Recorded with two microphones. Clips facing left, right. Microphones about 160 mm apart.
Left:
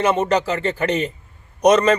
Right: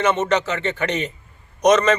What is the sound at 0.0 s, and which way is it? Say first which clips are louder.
Speech: left 1 dB; 35° left (ahead or behind).